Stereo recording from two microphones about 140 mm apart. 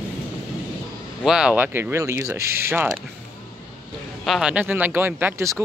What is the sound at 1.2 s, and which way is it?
Speech, 5° right (ahead or behind).